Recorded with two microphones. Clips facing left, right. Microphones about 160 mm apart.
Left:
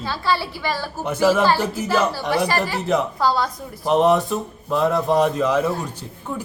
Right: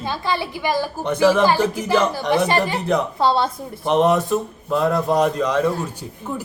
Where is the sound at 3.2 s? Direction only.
25° right (ahead or behind).